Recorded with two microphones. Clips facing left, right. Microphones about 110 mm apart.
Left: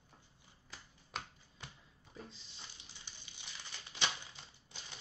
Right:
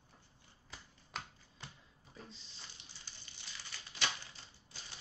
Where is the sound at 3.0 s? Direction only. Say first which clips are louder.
Left 1 dB; 15° left (ahead or behind).